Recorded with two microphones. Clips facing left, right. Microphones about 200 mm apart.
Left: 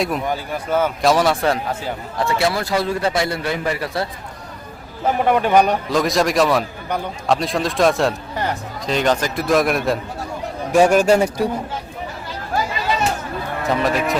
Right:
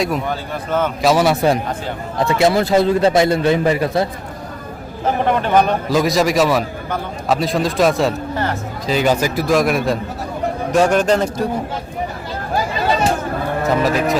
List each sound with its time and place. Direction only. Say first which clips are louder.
0.3 s a man's voice: even; 10° left (ahead or behind)
1.0 s a man's voice: right 4 dB; 5° right (ahead or behind)
2.1 s a man's voice: right 5 dB; 20° right (ahead or behind)
5.2 s a man's voice: left 1 dB; 10° left (ahead or behind)
5.9 s a man's voice: right 2 dB; centre (ahead or behind)
13.7 s a man's voice: right 2 dB; centre (ahead or behind)